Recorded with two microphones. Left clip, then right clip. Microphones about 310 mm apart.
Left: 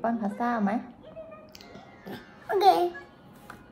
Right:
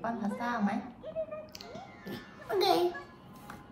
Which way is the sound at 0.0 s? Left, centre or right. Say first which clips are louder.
Left 6 dB; left.